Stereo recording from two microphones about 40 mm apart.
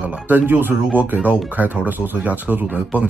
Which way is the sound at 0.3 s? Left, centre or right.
Right.